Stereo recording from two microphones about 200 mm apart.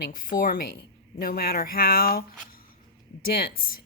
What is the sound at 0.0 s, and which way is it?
Speech, 45° left (ahead or behind).